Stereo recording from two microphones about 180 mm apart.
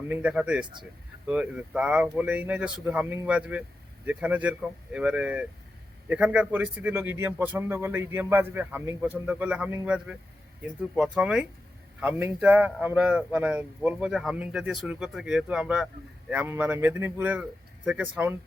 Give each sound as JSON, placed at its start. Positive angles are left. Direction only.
{"t": 0.1, "sound": "a man's voice", "side_deg": -5}
{"t": 0.6, "sound": "speech", "side_deg": -25}
{"t": 1.3, "sound": "a man's voice", "side_deg": -5}